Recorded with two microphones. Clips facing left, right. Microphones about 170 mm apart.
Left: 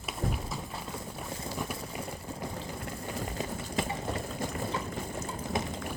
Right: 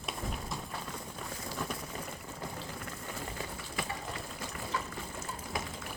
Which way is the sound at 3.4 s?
25° left (ahead or behind).